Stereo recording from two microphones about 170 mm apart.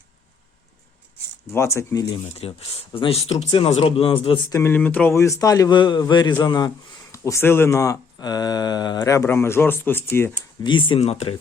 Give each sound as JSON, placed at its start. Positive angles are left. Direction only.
{"t": 1.5, "sound": "speech", "side_deg": 15}
{"t": 2.4, "sound": "speech", "side_deg": 35}
{"t": 4.5, "sound": "a man's voice", "side_deg": 10}
{"t": 10.6, "sound": "speech", "side_deg": 25}